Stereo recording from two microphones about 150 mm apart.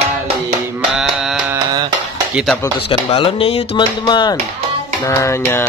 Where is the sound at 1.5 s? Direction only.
25° right (ahead or behind).